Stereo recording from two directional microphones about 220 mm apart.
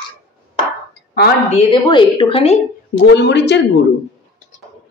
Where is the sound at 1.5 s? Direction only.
25° left (ahead or behind).